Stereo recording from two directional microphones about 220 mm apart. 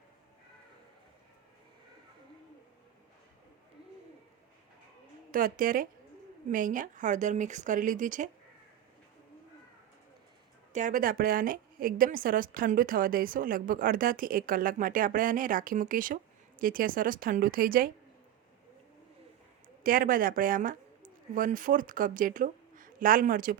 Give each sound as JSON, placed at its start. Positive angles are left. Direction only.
{"t": 5.3, "sound": "a woman's voice", "side_deg": -40}
{"t": 10.7, "sound": "a woman's voice", "side_deg": -35}
{"t": 19.8, "sound": "a woman's voice", "side_deg": -40}